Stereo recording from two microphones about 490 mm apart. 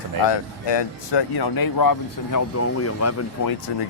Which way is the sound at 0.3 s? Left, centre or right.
Left.